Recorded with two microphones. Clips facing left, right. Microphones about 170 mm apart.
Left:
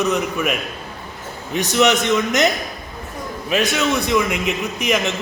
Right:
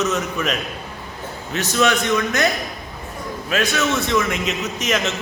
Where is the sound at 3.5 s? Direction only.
15° left (ahead or behind).